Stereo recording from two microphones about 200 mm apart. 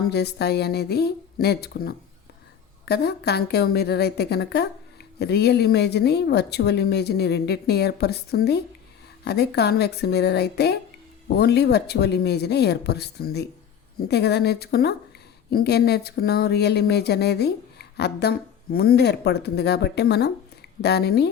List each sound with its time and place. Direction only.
0.1 s a woman's voice: 55° left (ahead or behind)